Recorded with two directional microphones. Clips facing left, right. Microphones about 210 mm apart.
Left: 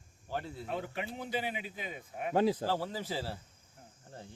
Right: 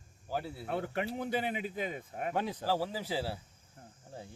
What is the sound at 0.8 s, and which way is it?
A man's voice, 50° right (ahead or behind).